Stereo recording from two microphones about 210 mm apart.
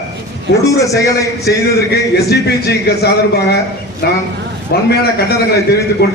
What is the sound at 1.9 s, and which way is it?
A man's voice, 50° left (ahead or behind).